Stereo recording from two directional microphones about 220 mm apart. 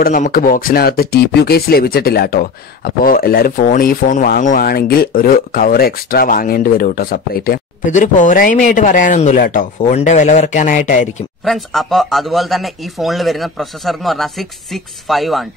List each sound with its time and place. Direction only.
0.0 s speech: 40° left (ahead or behind)
11.4 s speech: centre (ahead or behind)